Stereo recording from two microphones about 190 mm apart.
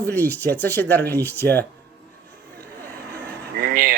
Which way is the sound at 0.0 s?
10° left (ahead or behind).